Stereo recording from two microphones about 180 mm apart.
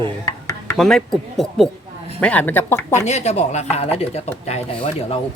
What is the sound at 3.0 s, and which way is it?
Speech, 40° left (ahead or behind).